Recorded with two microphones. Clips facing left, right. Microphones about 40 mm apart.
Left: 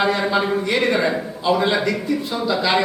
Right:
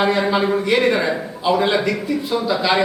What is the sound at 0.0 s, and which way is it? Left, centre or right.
A man's voice, centre.